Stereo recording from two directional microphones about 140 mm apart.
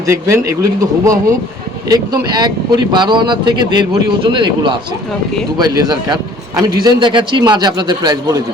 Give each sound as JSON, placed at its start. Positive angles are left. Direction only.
{"t": 0.0, "sound": "speech", "side_deg": -20}